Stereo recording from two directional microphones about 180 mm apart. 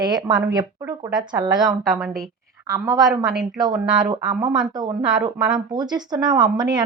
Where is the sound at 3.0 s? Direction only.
Centre (ahead or behind).